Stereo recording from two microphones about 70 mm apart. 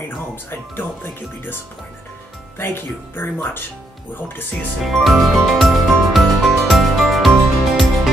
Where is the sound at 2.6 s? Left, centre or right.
Left.